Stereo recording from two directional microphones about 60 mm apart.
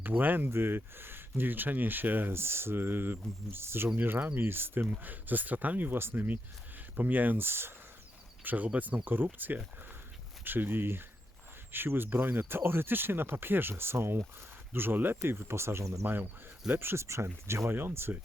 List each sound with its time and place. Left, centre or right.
0.0 s speech: right
8.4 s speech: right
16.0 s speech: right
17.7 s speech: right